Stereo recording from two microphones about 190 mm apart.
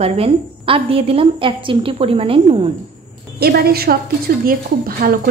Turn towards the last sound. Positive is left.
turn(degrees=-50)  # may be behind; listen again after turning